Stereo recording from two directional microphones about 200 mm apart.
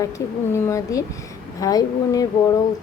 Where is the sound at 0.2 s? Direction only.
15° left (ahead or behind).